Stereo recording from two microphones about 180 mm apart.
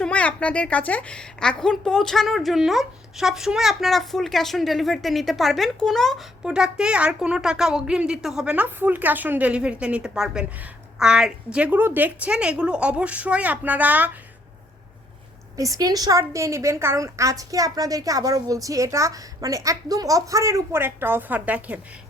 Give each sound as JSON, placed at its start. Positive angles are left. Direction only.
{"t": 0.0, "sound": "a child's voice", "side_deg": 5}
{"t": 15.5, "sound": "a woman's voice", "side_deg": -20}